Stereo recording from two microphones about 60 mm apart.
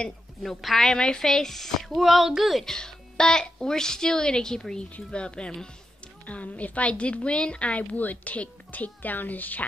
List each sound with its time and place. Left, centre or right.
0.4 s a woman's voice: centre
2.7 s a woman's voice: centre
6.2 s a woman's voice: left